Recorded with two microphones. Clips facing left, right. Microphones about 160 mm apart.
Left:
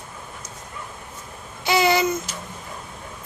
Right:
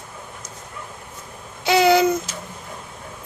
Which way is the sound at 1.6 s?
65° right (ahead or behind).